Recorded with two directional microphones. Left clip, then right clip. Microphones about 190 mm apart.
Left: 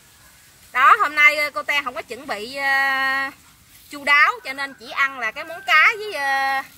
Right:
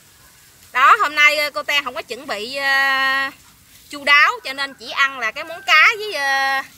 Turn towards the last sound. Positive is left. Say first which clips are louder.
# right 2 dB
turn(degrees=-5)  # may be behind; listen again after turning